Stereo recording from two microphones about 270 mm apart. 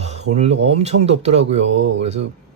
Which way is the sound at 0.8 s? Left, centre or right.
Right.